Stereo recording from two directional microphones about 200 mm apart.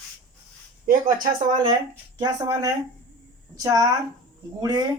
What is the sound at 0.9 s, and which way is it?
Speech, 45° right (ahead or behind).